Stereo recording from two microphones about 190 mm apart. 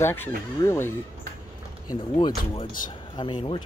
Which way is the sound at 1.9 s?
25° left (ahead or behind).